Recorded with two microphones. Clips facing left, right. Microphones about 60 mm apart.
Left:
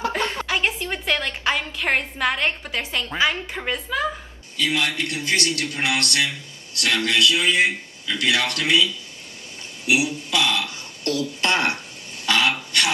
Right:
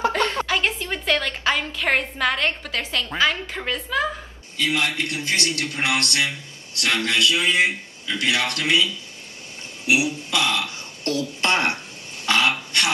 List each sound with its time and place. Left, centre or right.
0.5 s a woman's voice: centre
4.6 s a man's voice: right